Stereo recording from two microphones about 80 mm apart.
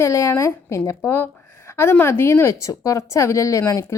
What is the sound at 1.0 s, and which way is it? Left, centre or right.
A woman's voice, left.